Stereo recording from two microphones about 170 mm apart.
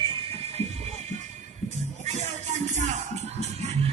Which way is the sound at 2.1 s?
45° right (ahead or behind).